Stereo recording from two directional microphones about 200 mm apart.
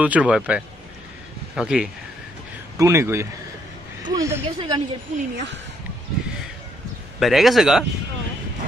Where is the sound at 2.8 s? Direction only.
15° right (ahead or behind).